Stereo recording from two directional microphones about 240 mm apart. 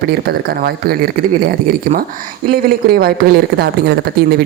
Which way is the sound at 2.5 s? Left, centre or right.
Right.